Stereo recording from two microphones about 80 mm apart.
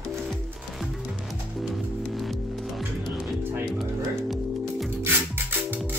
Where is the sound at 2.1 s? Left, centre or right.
Centre.